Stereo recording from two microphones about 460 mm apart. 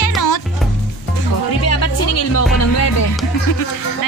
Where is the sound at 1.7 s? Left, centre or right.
Left.